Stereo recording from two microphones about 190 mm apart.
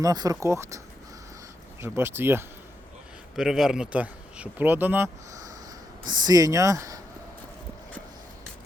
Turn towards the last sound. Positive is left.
turn(degrees=-20)  # may be behind; listen again after turning